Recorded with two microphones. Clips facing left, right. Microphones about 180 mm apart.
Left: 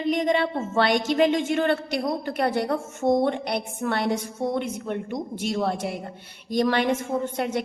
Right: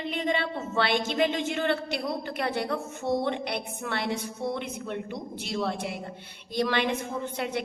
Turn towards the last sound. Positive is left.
turn(degrees=45)  # may be behind; listen again after turning